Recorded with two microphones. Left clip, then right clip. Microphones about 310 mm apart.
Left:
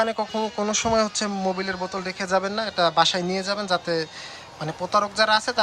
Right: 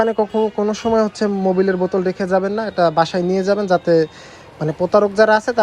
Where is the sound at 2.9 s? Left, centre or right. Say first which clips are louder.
Right 4 dB; centre.